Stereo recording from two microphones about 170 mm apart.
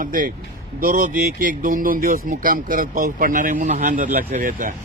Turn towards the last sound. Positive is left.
turn(degrees=-55)  # may be behind; listen again after turning